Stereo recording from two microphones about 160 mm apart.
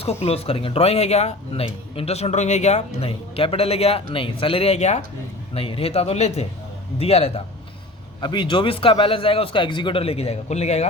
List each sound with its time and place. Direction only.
0.0 s speech: 40° left (ahead or behind)
8.2 s speech: 30° left (ahead or behind)